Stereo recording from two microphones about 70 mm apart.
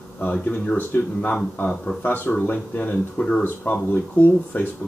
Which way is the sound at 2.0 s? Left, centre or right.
Left.